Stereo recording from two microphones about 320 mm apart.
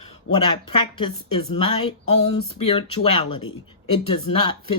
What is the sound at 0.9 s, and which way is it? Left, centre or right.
Speech, centre.